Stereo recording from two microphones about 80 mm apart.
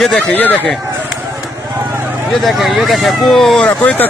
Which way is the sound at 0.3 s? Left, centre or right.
Left.